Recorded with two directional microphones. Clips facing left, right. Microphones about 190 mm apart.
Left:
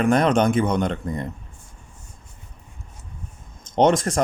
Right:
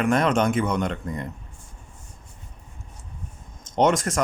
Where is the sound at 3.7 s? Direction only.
30° left (ahead or behind).